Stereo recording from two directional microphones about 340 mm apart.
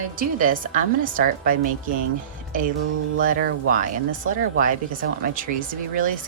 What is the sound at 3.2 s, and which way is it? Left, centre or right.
A woman's voice, right.